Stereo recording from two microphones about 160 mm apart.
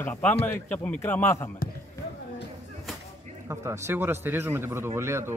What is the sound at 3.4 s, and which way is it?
A man's voice, 15° right (ahead or behind).